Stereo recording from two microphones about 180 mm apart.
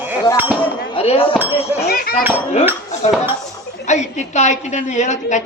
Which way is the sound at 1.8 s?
60° left (ahead or behind).